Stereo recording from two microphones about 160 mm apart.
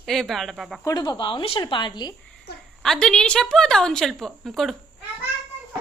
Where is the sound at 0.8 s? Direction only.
25° left (ahead or behind).